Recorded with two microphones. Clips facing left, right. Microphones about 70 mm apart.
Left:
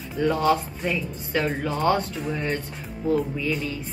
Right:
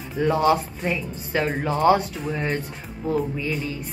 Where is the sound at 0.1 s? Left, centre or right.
Centre.